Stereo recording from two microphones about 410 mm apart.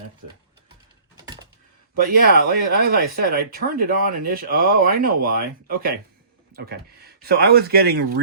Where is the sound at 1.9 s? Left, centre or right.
Right.